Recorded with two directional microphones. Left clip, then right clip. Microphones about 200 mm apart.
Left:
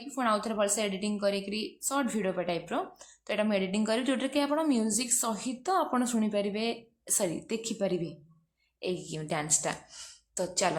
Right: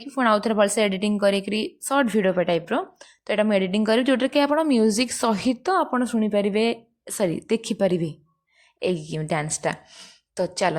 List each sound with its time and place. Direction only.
0.0 s a woman's voice: 35° right (ahead or behind)